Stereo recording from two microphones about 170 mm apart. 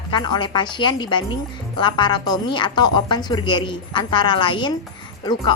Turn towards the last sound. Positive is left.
turn(degrees=25)  # may be behind; listen again after turning